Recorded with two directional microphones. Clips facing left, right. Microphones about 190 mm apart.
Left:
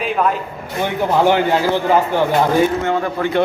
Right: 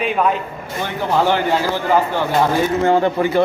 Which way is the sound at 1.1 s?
15° left (ahead or behind).